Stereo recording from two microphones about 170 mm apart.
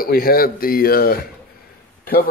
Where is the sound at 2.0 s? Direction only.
55° left (ahead or behind).